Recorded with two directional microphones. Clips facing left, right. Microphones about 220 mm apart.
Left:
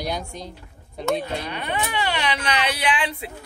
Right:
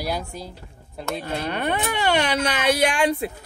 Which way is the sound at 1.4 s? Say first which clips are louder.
Right 4 dB; 45° right (ahead or behind).